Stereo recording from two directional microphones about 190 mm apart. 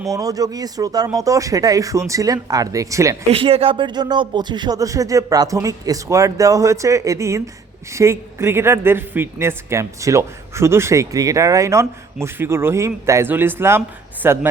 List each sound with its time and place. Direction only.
0.1 s speech: 20° right (ahead or behind)
3.3 s speech: 30° right (ahead or behind); by 14.3 s 10° right (ahead or behind)